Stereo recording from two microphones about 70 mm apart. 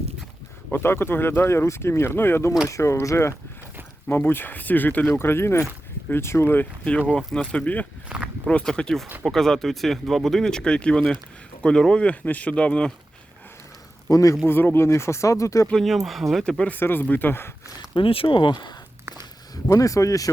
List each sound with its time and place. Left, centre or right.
0.7 s speech: left
2.6 s speech: left
4.1 s speech: left
7.2 s speech: centre
7.5 s speech: left
14.1 s speech: left
14.4 s speech: left
15.7 s speech: centre
16.4 s speech: centre
16.7 s speech: left
18.2 s speech: left
19.6 s speech: left